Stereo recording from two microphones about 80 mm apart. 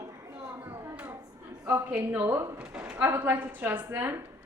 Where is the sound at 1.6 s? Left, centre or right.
Right.